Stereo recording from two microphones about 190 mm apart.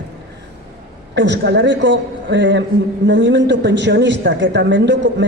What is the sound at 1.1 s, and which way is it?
A man's voice, 65° right (ahead or behind).